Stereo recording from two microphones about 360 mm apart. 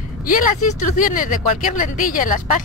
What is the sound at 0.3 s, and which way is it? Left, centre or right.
Speech, left.